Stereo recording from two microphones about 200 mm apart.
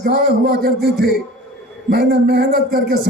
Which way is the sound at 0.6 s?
50° right (ahead or behind).